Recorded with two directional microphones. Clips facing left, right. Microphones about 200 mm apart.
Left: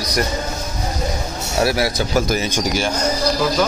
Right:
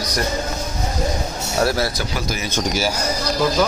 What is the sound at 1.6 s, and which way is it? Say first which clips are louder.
Speech: left 1 dB; 10° left (ahead or behind).